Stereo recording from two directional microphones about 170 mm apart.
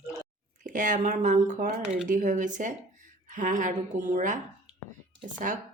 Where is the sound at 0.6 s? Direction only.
50° right (ahead or behind).